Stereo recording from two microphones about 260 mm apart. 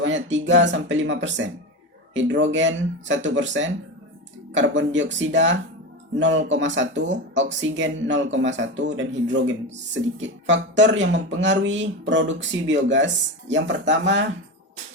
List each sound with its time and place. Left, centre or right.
0.0 s speech: right